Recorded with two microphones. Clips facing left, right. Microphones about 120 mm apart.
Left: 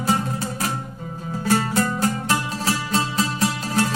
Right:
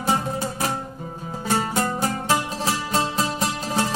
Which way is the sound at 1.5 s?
20° right (ahead or behind).